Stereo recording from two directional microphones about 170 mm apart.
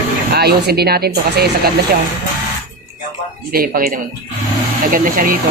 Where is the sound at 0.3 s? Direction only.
70° right (ahead or behind).